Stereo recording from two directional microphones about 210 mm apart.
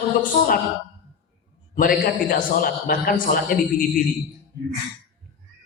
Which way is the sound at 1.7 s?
45° left (ahead or behind).